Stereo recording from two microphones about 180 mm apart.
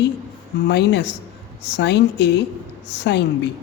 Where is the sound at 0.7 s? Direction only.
70° left (ahead or behind).